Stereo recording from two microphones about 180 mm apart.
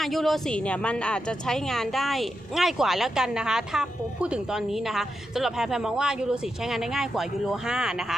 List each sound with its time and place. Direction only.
0.0 s a woman's voice: centre (ahead or behind)